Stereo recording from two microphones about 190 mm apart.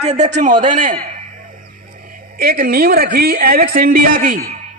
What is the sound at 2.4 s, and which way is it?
A woman's voice, 50° right (ahead or behind).